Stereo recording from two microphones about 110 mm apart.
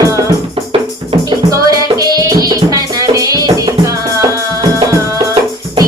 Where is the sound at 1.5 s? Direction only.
35° right (ahead or behind).